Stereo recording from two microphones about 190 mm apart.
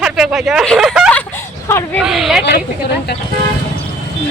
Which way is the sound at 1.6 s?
15° left (ahead or behind).